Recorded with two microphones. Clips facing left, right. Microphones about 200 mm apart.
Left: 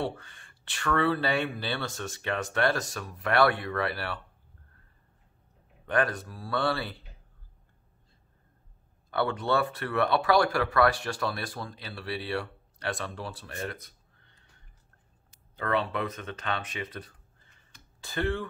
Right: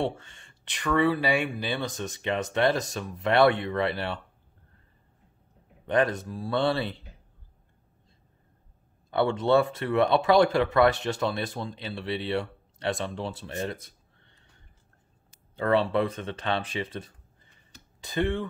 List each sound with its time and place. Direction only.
0.0 s speech: 25° right (ahead or behind)
5.9 s speech: 20° right (ahead or behind)
9.1 s speech: 25° right (ahead or behind)
15.5 s speech: 30° right (ahead or behind)